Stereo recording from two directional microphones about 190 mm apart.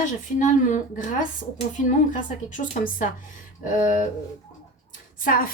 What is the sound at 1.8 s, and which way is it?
Speech, 40° left (ahead or behind).